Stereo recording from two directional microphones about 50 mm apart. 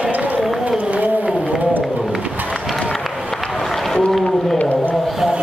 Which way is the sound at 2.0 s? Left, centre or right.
Centre.